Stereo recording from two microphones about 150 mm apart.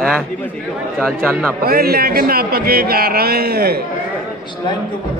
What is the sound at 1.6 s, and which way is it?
A man's voice, 85° right.